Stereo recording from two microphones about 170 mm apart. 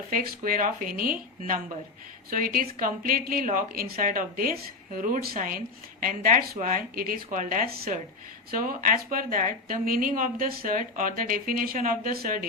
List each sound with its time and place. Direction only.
0.1 s speech: 55° right (ahead or behind)